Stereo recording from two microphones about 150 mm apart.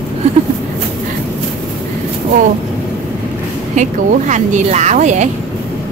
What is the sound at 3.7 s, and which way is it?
Speech, 55° right (ahead or behind).